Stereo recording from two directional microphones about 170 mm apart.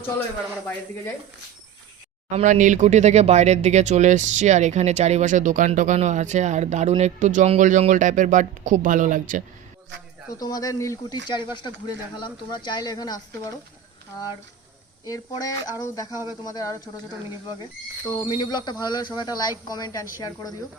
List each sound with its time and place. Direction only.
2.3 s speech: 45° right (ahead or behind)
10.4 s speech: 20° left (ahead or behind)
15.0 s speech: 20° left (ahead or behind)
18.1 s speech: 25° left (ahead or behind)